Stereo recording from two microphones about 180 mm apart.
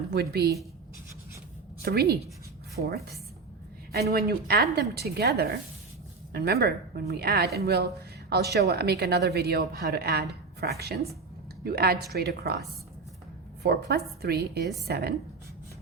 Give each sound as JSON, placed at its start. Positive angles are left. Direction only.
{"t": 0.1, "sound": "a woman's voice", "side_deg": -65}
{"t": 1.8, "sound": "a woman's voice", "side_deg": -60}
{"t": 13.6, "sound": "a woman's voice", "side_deg": -65}